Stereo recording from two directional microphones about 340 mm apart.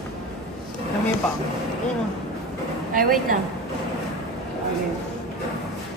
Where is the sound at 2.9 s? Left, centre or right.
Right.